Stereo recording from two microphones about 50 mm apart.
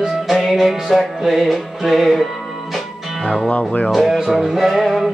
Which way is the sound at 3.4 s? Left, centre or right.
Left.